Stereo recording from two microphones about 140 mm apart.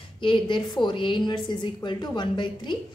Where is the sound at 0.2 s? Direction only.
35° left (ahead or behind).